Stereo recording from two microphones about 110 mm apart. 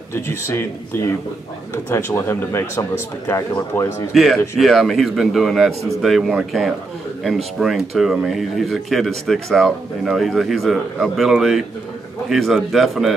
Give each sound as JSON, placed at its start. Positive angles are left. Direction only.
{"t": 0.1, "sound": "speech", "side_deg": 25}
{"t": 4.1, "sound": "speech", "side_deg": 0}